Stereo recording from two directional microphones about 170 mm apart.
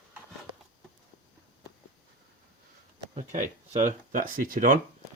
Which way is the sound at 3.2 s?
45° right (ahead or behind).